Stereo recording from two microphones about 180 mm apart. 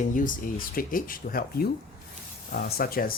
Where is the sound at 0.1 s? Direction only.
50° left (ahead or behind).